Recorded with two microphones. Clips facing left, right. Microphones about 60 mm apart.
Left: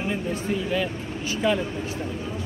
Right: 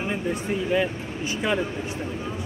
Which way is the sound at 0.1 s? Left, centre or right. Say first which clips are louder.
Even; centre.